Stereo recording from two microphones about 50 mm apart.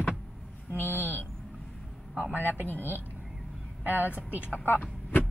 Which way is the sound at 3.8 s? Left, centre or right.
Right.